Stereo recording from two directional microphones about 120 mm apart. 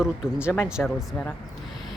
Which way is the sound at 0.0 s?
10° right (ahead or behind).